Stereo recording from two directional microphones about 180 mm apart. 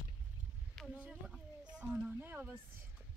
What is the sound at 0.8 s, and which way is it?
Speech, 5° right (ahead or behind).